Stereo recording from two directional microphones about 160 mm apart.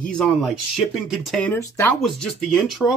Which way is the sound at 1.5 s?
15° left (ahead or behind).